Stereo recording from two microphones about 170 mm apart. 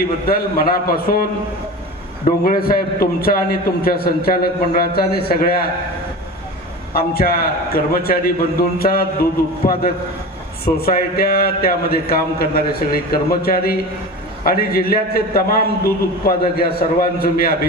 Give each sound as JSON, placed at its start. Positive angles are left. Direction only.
{"t": 0.3, "sound": "a man's voice", "side_deg": 60}
{"t": 2.4, "sound": "a man's voice", "side_deg": 60}
{"t": 6.9, "sound": "a man's voice", "side_deg": 60}
{"t": 10.8, "sound": "a man's voice", "side_deg": 60}